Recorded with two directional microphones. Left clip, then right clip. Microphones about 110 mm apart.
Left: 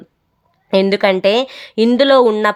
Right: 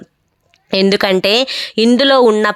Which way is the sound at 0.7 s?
35° right (ahead or behind).